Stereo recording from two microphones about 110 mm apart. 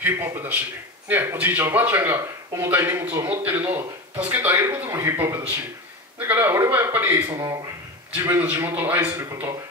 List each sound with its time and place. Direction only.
0.0 s speech: 20° right (ahead or behind)
9.1 s speech: 25° right (ahead or behind)